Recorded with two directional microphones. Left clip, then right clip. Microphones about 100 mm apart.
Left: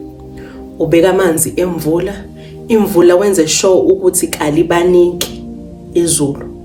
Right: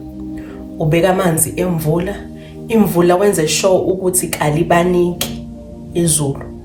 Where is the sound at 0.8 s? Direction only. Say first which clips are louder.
Left 4 dB; 30° left (ahead or behind).